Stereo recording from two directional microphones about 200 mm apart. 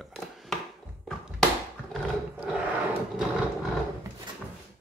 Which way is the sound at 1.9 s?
5° right (ahead or behind).